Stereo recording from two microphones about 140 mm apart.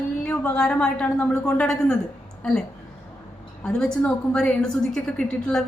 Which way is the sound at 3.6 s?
5° left (ahead or behind).